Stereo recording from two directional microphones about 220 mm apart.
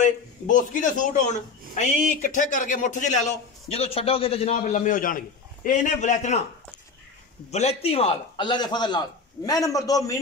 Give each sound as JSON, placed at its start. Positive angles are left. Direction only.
{"t": 0.0, "sound": "a man's voice", "side_deg": 35}
{"t": 7.5, "sound": "a man's voice", "side_deg": 30}